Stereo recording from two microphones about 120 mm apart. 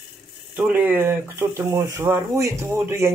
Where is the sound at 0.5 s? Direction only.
15° right (ahead or behind).